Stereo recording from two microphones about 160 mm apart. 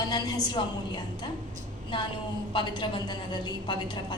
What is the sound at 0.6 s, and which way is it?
Speech, 30° left (ahead or behind).